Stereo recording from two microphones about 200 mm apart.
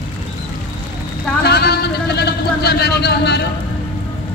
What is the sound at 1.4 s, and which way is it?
A man's voice, 55° left (ahead or behind).